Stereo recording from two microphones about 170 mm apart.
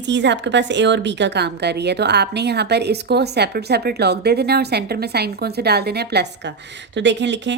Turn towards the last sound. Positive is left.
turn(degrees=-90)